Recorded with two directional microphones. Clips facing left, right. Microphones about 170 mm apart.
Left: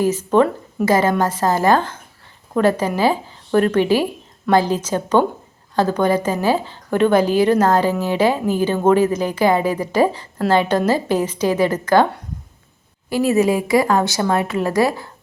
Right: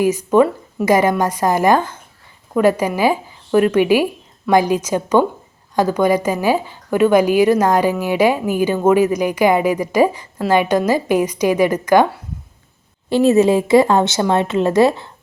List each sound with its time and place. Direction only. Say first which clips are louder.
0.0 s a woman's voice: right 2 dB; 10° right (ahead or behind)
13.1 s a woman's voice: right 4 dB; 25° right (ahead or behind)